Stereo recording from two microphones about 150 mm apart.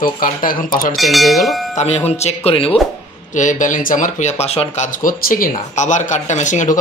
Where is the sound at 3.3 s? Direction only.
55° left (ahead or behind).